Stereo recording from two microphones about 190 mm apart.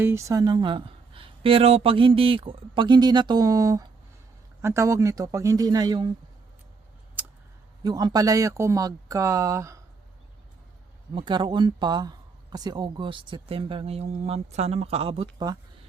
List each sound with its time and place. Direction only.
0.0 s speech: 15° right (ahead or behind)
7.2 s scissors: 10° right (ahead or behind)
7.9 s speech: 20° right (ahead or behind)
11.1 s speech: 25° right (ahead or behind)